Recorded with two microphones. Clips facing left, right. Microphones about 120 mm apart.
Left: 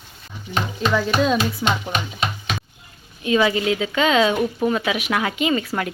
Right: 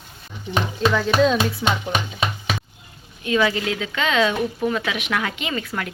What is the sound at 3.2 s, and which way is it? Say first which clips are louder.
Speech: left 2 dB; 10° left (ahead or behind).